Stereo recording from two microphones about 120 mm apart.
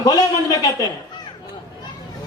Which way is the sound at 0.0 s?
30° left (ahead or behind).